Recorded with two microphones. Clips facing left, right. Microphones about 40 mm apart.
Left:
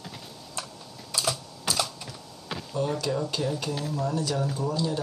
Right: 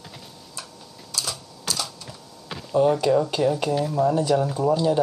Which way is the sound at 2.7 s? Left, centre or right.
Right.